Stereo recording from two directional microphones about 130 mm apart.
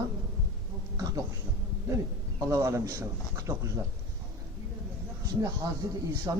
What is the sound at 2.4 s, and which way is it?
Speech, 20° right (ahead or behind).